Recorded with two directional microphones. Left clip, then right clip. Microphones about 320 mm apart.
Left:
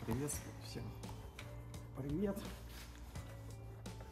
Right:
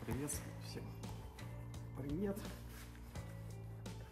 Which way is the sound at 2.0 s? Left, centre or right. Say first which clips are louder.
Left 2 dB; centre.